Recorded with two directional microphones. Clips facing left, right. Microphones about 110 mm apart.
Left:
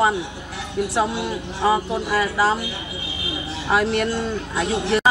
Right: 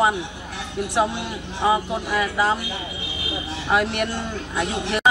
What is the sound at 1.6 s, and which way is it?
Speech, 15° right (ahead or behind).